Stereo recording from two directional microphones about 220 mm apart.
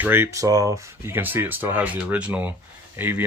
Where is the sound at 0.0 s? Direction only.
10° right (ahead or behind).